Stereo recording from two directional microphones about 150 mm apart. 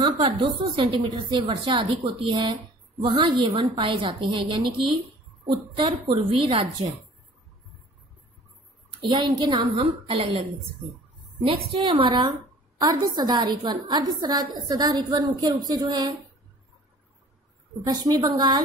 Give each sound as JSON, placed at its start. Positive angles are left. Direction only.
{"t": 0.0, "sound": "a woman's voice", "side_deg": -35}
{"t": 6.1, "sound": "a woman's voice", "side_deg": -35}
{"t": 9.1, "sound": "a woman's voice", "side_deg": -30}
{"t": 11.4, "sound": "a woman's voice", "side_deg": -35}
{"t": 17.8, "sound": "a woman's voice", "side_deg": -25}